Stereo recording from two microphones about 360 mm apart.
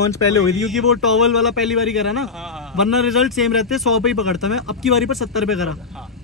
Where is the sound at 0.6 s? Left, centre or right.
Centre.